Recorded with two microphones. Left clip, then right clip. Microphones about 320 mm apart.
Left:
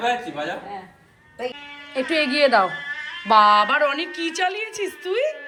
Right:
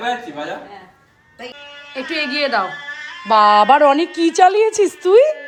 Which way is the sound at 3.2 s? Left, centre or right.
Centre.